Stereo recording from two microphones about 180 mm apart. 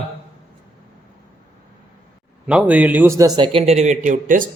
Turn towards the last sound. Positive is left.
turn(degrees=-45)  # may be behind; listen again after turning